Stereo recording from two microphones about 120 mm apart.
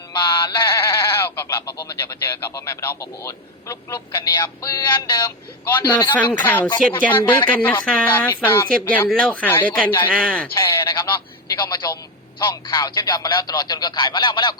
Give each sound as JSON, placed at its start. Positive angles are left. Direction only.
{"t": 0.1, "sound": "synthetic singing", "side_deg": 40}
{"t": 0.9, "sound": "speech", "side_deg": 20}
{"t": 4.2, "sound": "speech", "side_deg": 35}
{"t": 5.6, "sound": "speech", "side_deg": 15}
{"t": 10.5, "sound": "speech", "side_deg": 25}